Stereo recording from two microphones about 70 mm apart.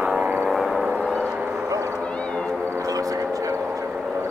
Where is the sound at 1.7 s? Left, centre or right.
Right.